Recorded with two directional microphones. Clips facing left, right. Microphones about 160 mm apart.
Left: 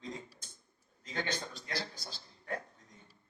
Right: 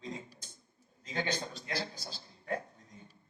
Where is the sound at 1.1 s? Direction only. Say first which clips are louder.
Right 2 dB; 20° right (ahead or behind).